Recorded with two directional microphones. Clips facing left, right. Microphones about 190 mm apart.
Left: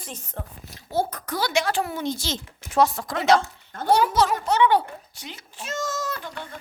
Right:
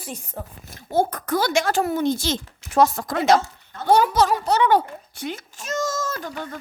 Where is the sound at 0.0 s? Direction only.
10° right (ahead or behind).